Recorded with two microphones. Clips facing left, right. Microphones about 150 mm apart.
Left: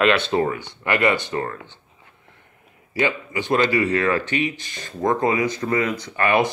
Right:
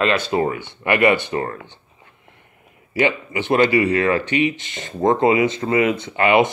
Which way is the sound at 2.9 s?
20° right (ahead or behind).